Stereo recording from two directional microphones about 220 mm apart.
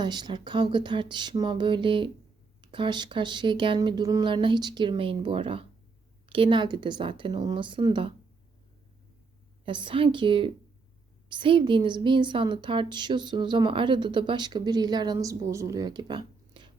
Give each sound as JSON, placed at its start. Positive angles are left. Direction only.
{"t": 0.0, "sound": "a woman's voice", "side_deg": -20}
{"t": 9.6, "sound": "a woman's voice", "side_deg": -20}